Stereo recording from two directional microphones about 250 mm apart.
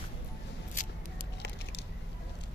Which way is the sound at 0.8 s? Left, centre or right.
Left.